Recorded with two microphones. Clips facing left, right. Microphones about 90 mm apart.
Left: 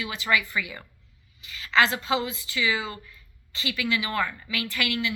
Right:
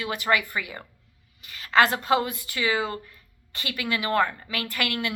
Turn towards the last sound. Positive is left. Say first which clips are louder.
# even
turn(degrees=-50)  # may be behind; listen again after turning